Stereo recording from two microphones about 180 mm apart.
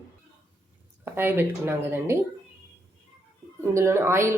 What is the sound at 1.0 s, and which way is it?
Speech, 10° right (ahead or behind).